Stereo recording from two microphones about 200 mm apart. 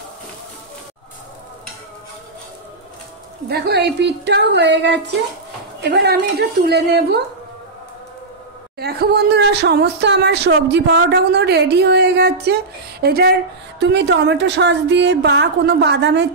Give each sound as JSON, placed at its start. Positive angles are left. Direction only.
{"t": 3.4, "sound": "speech", "side_deg": -55}
{"t": 8.7, "sound": "speech", "side_deg": -55}